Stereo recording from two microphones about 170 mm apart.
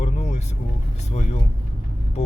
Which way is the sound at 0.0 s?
40° left (ahead or behind).